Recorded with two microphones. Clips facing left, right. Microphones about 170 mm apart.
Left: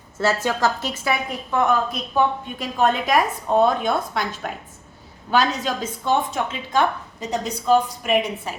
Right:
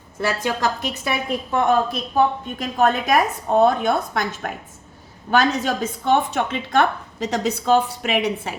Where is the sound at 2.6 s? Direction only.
45° right (ahead or behind).